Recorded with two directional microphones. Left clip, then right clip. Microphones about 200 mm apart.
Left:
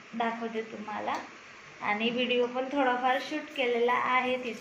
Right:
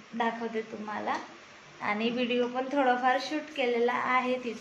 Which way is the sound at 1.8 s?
20° right (ahead or behind).